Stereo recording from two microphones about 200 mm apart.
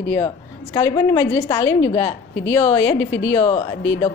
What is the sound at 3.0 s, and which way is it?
Speech, 70° left (ahead or behind).